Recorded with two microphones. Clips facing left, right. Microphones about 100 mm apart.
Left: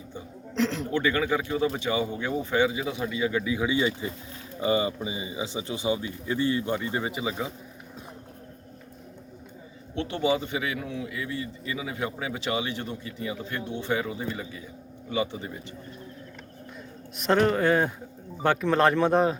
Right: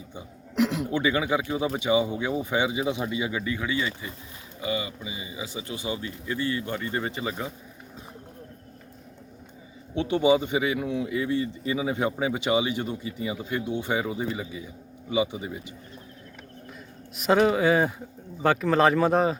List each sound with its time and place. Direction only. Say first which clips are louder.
0.1 s speech: left 3 dB; 10° right (ahead or behind)
3.3 s speech: left 2 dB; 5° left (ahead or behind)
3.6 s speech: left 4 dB; 20° left (ahead or behind)
4.6 s speech: left 5 dB; 35° left (ahead or behind); by 7.5 s 5° left (ahead or behind)
9.9 s speech: right 5 dB; 15° right (ahead or behind)
17.2 s speech: right 2 dB; 5° right (ahead or behind)